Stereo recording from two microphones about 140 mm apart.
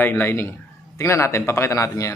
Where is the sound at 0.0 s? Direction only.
15° left (ahead or behind).